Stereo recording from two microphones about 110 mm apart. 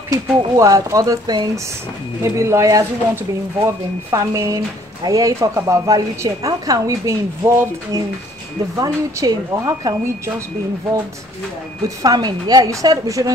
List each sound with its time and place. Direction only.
0.1 s a woman's voice: 30° right (ahead or behind)
2.2 s a woman's voice: 25° right (ahead or behind)
12.0 s a woman's voice: 35° right (ahead or behind)